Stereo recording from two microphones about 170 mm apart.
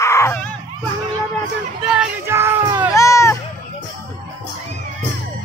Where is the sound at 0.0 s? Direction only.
15° left (ahead or behind).